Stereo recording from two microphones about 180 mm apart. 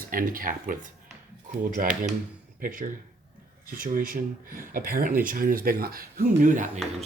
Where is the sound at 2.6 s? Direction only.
50° right (ahead or behind).